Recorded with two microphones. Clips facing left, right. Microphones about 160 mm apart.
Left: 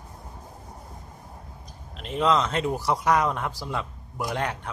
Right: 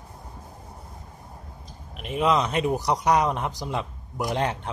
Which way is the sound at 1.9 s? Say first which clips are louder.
Even; 15° right (ahead or behind).